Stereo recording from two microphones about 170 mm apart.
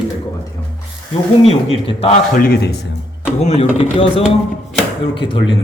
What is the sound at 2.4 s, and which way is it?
Speech, 60° left (ahead or behind).